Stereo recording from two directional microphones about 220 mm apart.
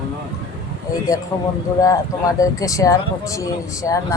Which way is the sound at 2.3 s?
15° left (ahead or behind).